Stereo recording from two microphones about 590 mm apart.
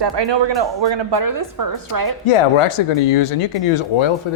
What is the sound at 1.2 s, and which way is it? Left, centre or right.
Speech, right.